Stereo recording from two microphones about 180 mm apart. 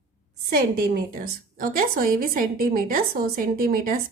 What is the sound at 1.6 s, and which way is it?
A woman's voice, 55° right (ahead or behind).